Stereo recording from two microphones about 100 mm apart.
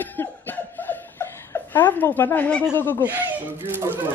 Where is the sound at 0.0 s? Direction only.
20° left (ahead or behind).